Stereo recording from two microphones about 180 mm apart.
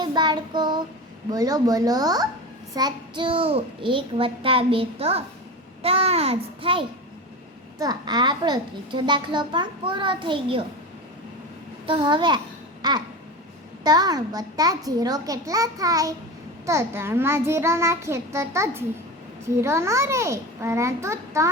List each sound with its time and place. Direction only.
0.0 s child singing: 25° right (ahead or behind)
1.3 s a child's voice: 20° right (ahead or behind)
11.9 s a child's voice: 25° right (ahead or behind)
12.8 s babbling: 20° right (ahead or behind)
13.8 s a child's voice: 20° right (ahead or behind)